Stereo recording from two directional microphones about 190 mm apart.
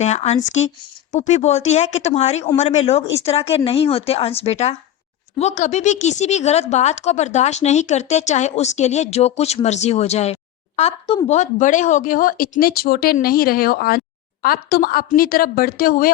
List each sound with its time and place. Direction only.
0.0 s a woman's voice: 35° left (ahead or behind)